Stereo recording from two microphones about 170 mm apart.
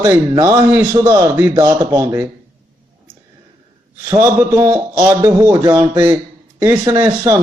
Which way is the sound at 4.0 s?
15° right (ahead or behind).